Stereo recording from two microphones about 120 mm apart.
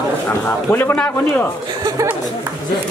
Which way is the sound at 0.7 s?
15° left (ahead or behind).